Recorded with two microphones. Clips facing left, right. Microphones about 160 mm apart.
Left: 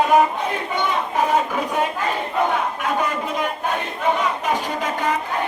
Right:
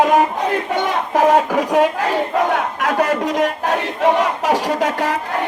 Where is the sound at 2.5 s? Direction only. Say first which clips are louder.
Right 4 dB; 75° right (ahead or behind).